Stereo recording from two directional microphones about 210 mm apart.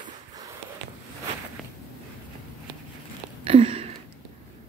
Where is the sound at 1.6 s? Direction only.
Centre (ahead or behind).